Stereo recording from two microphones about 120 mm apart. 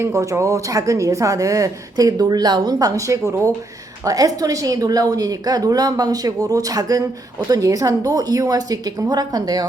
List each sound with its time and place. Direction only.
0.0 s a woman's voice: 25° right (ahead or behind)